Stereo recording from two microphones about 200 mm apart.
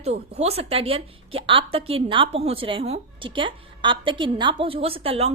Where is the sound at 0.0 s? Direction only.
30° right (ahead or behind).